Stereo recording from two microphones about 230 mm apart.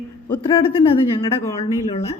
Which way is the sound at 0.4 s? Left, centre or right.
Left.